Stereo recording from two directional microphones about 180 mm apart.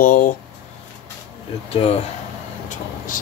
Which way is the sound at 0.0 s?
50° left (ahead or behind).